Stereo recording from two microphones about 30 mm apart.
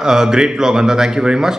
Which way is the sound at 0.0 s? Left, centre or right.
Right.